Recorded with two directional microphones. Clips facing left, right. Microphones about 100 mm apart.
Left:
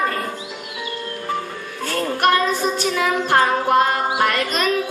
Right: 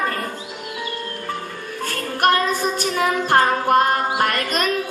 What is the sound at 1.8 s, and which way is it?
Child singing, 45° right (ahead or behind).